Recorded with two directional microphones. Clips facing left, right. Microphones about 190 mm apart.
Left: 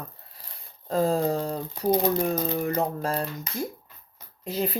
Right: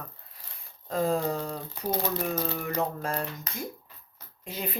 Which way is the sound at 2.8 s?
35° left (ahead or behind).